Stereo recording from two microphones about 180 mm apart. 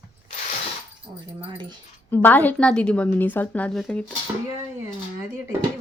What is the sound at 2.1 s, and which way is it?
A woman's voice, 10° left (ahead or behind).